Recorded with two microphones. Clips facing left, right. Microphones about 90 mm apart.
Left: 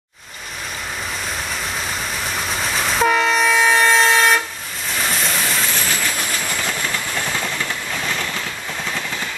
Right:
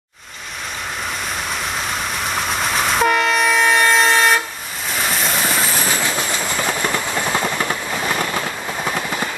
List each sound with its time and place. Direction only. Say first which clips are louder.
2.3 s train: right 3 dB; 5° right (ahead or behind)
4.9 s vehicle: right 1 dB; 5° right (ahead or behind)
6.1 s train: right 3 dB; 25° right (ahead or behind)